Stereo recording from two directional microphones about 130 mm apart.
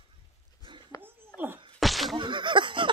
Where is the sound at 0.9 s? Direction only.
25° left (ahead or behind).